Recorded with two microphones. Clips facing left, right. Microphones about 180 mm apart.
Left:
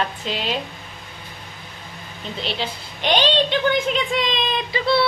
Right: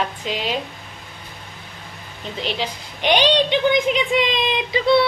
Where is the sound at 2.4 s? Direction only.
10° right (ahead or behind).